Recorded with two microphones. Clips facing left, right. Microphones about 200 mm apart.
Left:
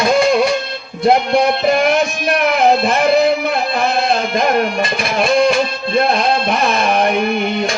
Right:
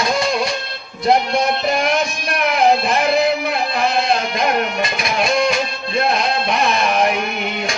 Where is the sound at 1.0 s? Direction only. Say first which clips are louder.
Left 3 dB; centre (ahead or behind).